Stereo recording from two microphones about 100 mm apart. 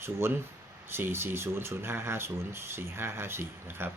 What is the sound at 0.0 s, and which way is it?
Speech, 25° right (ahead or behind).